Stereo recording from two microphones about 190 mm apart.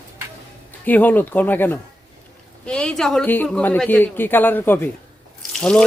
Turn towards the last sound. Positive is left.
turn(degrees=5)  # may be behind; listen again after turning